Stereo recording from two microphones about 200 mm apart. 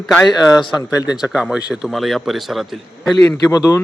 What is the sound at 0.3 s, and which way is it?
Speech, 20° left (ahead or behind).